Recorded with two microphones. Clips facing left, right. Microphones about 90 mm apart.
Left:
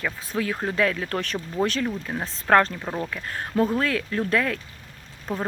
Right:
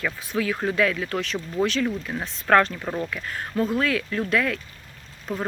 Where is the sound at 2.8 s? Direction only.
10° left (ahead or behind).